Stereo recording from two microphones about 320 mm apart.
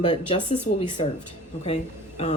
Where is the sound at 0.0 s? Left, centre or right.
Centre.